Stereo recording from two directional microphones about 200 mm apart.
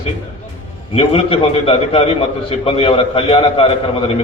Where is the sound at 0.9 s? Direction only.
25° left (ahead or behind).